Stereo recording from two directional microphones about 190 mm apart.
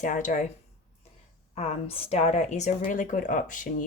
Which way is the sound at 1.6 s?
30° left (ahead or behind).